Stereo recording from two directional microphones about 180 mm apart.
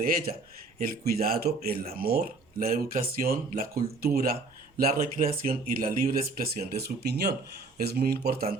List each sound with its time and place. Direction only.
0.0 s speech: 55° right (ahead or behind)